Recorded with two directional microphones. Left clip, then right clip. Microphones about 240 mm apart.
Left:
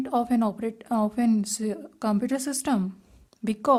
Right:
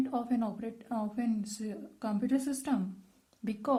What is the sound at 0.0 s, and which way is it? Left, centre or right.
A woman's voice, left.